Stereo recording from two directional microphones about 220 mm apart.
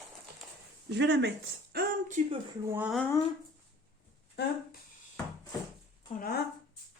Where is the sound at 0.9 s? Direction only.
50° right (ahead or behind).